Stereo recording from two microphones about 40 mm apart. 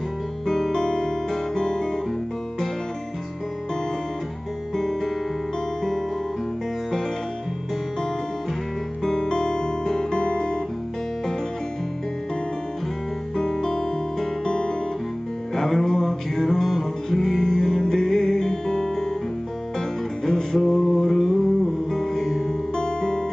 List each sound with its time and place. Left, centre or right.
0.5 s music: centre
0.8 s guitar: centre
4.7 s music: centre
9.2 s guitar: centre
13.4 s music: centre
14.4 s guitar: centre
15.5 s music: centre
16.4 s music: centre
20.2 s music: centre
22.8 s music: left